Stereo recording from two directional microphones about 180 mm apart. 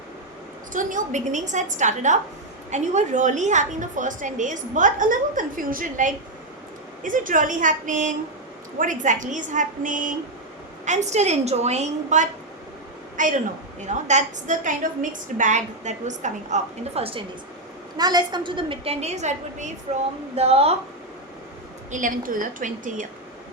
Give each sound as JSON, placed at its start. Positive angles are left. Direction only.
{"t": 0.7, "sound": "a woman's voice", "side_deg": -45}
{"t": 21.9, "sound": "a woman's voice", "side_deg": -45}